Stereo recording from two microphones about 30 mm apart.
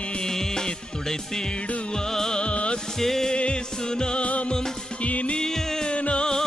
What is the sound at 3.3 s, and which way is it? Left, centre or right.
Music, left.